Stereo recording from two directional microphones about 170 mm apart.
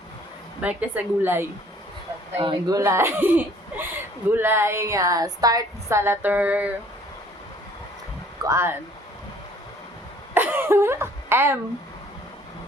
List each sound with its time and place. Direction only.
0.6 s a woman's voice: 10° right (ahead or behind)
2.4 s a woman's voice: 25° right (ahead or behind); by 6.7 s 10° right (ahead or behind)
8.4 s a woman's voice: 15° right (ahead or behind)
10.3 s a sound: 10° right (ahead or behind)